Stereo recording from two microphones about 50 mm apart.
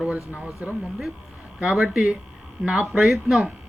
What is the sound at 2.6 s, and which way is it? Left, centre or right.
Speech, centre.